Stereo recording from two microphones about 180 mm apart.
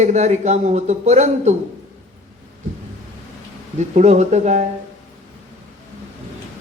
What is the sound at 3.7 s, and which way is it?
Speech, 40° right (ahead or behind).